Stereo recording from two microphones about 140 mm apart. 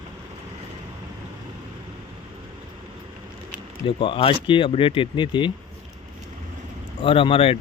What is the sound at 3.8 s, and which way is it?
Speech, 35° left (ahead or behind).